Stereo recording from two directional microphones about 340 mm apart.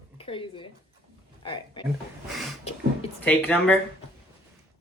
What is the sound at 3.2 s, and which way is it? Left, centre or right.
Speech, centre.